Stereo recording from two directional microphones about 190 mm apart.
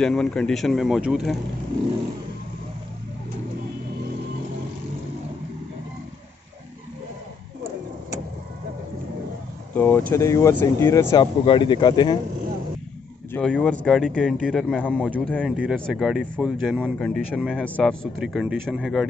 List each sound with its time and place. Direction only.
0.0 s speech: 5° left (ahead or behind)
9.8 s speech: 10° left (ahead or behind)
13.3 s speech: 5° left (ahead or behind)
15.1 s speech: 5° left (ahead or behind)
15.5 s speech: 5° right (ahead or behind)